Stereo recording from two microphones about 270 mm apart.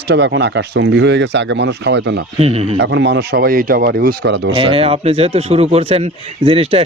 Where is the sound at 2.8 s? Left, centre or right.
Right.